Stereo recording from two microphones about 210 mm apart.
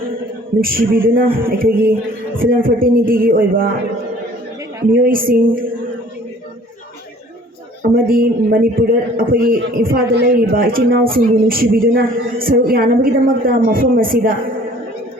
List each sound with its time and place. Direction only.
0.6 s a woman's voice: 45° right (ahead or behind)
4.9 s speech: 40° right (ahead or behind)
7.8 s a woman's voice: 45° right (ahead or behind)